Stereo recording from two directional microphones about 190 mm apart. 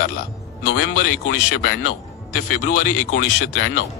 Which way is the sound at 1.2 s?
50° left (ahead or behind).